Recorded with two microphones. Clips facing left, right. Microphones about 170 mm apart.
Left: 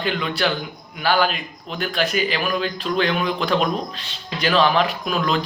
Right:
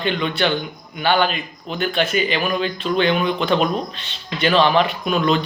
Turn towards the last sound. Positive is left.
turn(degrees=0)  # may be behind; listen again after turning